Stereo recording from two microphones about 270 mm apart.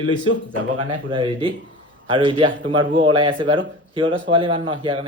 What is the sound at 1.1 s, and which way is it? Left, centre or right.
A man's voice, centre.